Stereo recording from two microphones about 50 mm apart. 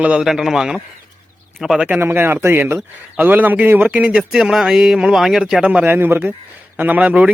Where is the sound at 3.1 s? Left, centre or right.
Right.